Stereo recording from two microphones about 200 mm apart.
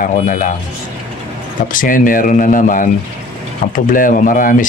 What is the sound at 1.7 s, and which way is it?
Speech, 40° left (ahead or behind).